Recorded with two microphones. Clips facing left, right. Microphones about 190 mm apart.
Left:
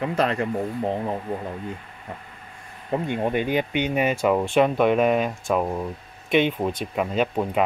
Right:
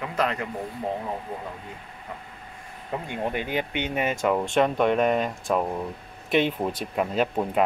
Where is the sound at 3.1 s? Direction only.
20° left (ahead or behind).